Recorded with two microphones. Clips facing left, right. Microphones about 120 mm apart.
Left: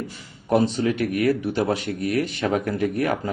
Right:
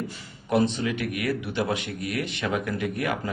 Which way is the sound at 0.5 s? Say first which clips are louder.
Left 3 dB; 40° left (ahead or behind).